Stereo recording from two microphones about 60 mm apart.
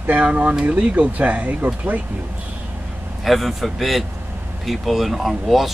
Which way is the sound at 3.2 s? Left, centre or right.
Centre.